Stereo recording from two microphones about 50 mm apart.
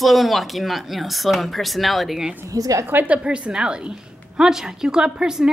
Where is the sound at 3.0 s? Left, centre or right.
Right.